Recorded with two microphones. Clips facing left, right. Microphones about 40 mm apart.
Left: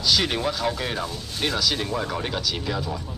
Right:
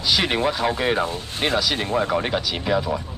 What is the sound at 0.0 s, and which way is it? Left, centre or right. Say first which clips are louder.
Speech: right 2 dB; right.